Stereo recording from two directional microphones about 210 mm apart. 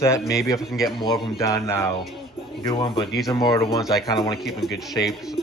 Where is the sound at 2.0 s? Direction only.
Centre (ahead or behind).